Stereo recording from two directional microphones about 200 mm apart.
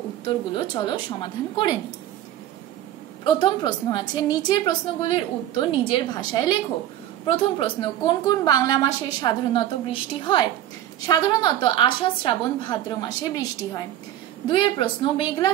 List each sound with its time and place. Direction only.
0.2 s a woman's voice: 25° left (ahead or behind)
3.3 s a woman's voice: 25° left (ahead or behind)